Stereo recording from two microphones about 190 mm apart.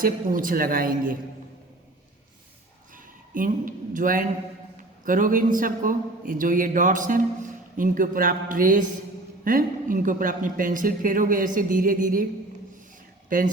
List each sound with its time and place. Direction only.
0.0 s speech: 45° right (ahead or behind)
2.9 s speech: 45° right (ahead or behind)